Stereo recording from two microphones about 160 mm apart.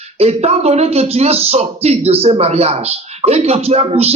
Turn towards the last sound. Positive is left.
turn(degrees=-40)  # may be behind; listen again after turning